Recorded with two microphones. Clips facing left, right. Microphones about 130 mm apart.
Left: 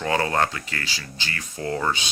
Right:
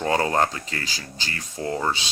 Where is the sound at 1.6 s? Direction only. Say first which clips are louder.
Even; 20° right (ahead or behind).